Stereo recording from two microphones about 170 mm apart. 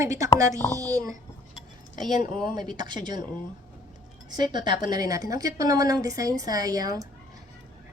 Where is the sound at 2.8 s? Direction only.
25° right (ahead or behind).